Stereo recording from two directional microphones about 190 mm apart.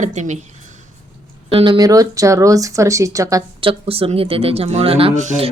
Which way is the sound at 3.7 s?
30° right (ahead or behind).